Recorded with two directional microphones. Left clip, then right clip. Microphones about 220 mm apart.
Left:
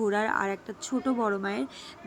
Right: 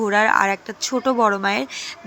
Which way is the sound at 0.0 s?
10° right (ahead or behind).